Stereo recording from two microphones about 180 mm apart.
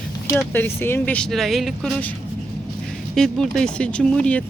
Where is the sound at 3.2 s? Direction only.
5° left (ahead or behind).